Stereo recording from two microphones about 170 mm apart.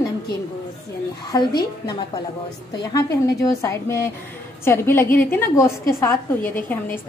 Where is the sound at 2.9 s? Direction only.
20° left (ahead or behind).